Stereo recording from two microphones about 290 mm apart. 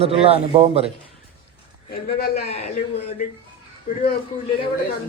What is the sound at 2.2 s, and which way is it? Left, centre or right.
Speech, left.